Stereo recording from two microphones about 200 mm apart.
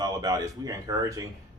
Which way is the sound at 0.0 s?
20° right (ahead or behind).